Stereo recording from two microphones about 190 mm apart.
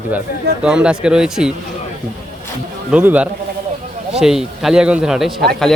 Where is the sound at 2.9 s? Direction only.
5° right (ahead or behind).